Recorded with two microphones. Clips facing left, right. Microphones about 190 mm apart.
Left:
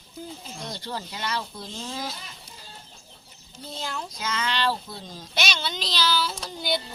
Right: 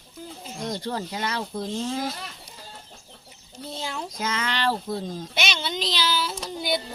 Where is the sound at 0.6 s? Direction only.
45° right (ahead or behind).